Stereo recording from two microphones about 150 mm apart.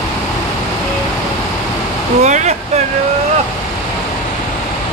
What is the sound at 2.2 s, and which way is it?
Vehicle, 50° right (ahead or behind).